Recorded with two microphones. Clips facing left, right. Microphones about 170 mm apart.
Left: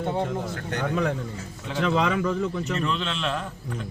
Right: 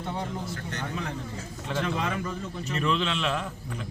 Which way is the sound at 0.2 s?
60° left (ahead or behind).